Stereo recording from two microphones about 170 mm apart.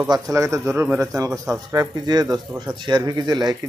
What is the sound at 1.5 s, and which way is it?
Speech, 20° right (ahead or behind).